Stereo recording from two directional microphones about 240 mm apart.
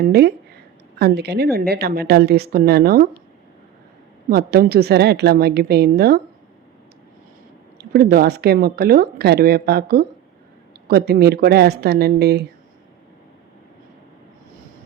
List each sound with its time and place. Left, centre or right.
0.0 s speech: right
4.3 s speech: right
7.8 s speech: right